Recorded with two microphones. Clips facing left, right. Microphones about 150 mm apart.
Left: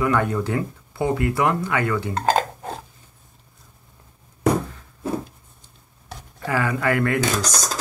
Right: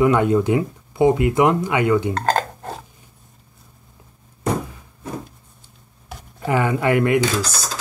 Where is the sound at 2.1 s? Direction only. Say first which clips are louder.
Even; 10° left (ahead or behind).